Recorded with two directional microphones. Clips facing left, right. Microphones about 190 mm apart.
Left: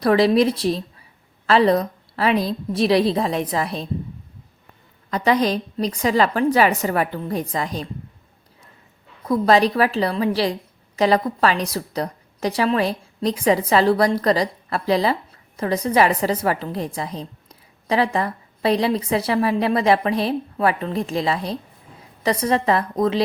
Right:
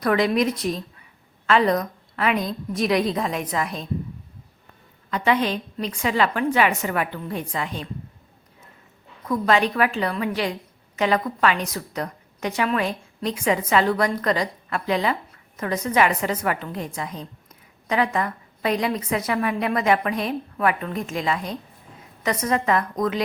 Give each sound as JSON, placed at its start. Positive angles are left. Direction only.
{"t": 0.0, "sound": "a woman's voice", "side_deg": 30}
{"t": 5.1, "sound": "a woman's voice", "side_deg": 40}
{"t": 9.2, "sound": "a woman's voice", "side_deg": 35}